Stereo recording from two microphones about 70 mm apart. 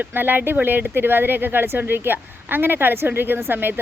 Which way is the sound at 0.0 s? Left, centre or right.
Right.